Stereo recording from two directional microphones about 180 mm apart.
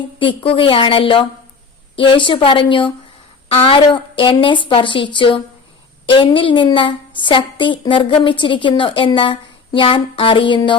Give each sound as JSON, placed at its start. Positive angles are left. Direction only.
{"t": 0.2, "sound": "a woman's voice", "side_deg": 30}